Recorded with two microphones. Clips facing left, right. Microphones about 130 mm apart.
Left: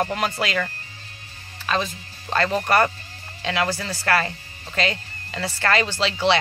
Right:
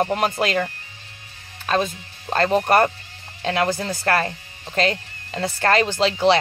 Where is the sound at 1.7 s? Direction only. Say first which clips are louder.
Right 3 dB; 40° right (ahead or behind).